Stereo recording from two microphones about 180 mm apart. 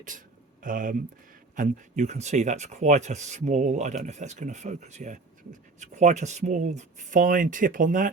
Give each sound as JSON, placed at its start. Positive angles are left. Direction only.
{"t": 0.1, "sound": "speech", "side_deg": -45}